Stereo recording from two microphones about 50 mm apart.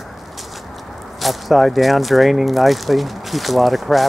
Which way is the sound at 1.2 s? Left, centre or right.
Centre.